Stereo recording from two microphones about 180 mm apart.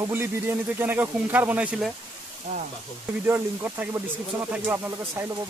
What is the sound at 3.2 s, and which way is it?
Speech, 10° right (ahead or behind).